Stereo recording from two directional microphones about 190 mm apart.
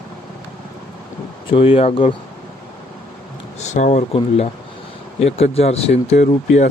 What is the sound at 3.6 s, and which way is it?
Speech, 40° left (ahead or behind).